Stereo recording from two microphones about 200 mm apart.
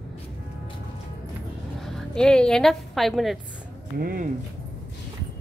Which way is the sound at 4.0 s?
45° right (ahead or behind).